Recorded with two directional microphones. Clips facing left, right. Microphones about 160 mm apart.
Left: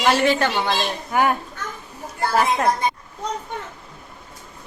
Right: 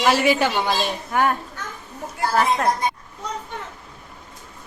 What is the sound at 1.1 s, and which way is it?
Speech, 10° left (ahead or behind).